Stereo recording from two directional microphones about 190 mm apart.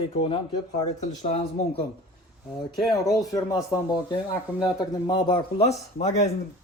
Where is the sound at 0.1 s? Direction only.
30° left (ahead or behind).